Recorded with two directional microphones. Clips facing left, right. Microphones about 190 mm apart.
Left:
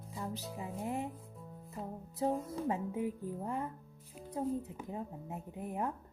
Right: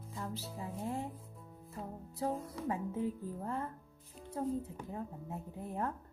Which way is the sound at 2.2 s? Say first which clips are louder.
Left 3 dB; 25° left (ahead or behind).